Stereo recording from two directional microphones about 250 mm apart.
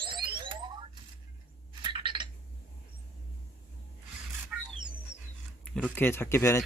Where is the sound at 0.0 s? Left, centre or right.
Centre.